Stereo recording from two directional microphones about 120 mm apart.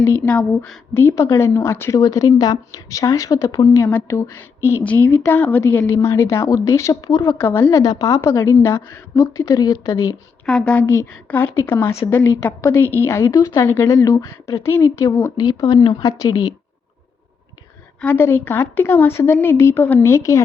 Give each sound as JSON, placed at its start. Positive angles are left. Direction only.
{"t": 0.0, "sound": "speech", "side_deg": 20}
{"t": 0.9, "sound": "a woman's voice", "side_deg": 20}
{"t": 2.0, "sound": "speech", "side_deg": 30}
{"t": 3.8, "sound": "a woman's voice", "side_deg": 20}
{"t": 7.3, "sound": "a woman's voice", "side_deg": 20}
{"t": 10.4, "sound": "a woman's voice", "side_deg": 5}
{"t": 18.0, "sound": "a woman's voice", "side_deg": 15}